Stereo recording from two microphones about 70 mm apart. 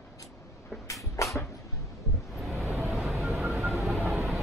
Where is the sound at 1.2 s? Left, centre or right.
Left.